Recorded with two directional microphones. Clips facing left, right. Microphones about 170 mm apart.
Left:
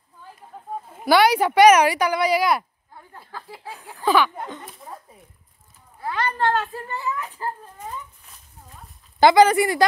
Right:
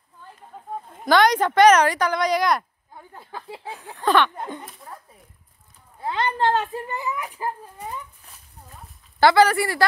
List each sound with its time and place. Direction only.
0.8 s a woman's voice: 10° left (ahead or behind)
2.9 s a sound: 20° right (ahead or behind)
3.6 s a sound: centre (ahead or behind)
4.4 s a child's voice: 15° right (ahead or behind)
5.9 s a child's voice: 20° right (ahead or behind)
9.2 s a woman's voice: 15° left (ahead or behind)